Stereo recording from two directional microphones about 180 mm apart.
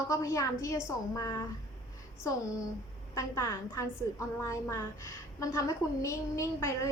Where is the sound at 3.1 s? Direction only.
15° left (ahead or behind).